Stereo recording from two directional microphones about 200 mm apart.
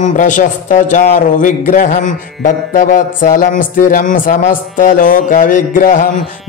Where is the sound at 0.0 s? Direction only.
40° left (ahead or behind).